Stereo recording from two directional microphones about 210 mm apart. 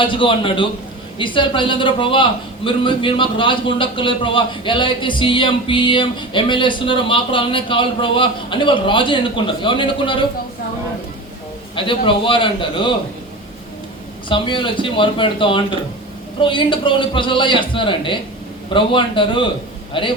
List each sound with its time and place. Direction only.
0.0 s a man's voice: 25° left (ahead or behind)
11.7 s a man's voice: 25° left (ahead or behind)
14.3 s a man's voice: 25° left (ahead or behind)